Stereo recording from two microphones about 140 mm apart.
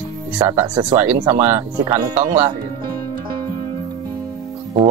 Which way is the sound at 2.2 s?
45° right (ahead or behind).